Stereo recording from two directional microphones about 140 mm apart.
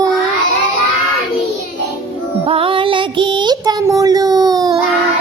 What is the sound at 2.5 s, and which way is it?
Music, 40° right (ahead or behind).